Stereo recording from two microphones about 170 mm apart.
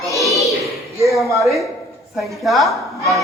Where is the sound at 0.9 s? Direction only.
20° right (ahead or behind).